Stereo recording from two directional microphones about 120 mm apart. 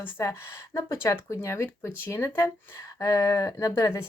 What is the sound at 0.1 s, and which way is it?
Speech, 25° left (ahead or behind).